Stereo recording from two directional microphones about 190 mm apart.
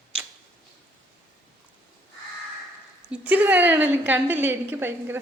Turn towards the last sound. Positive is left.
turn(degrees=-10)  # may be behind; listen again after turning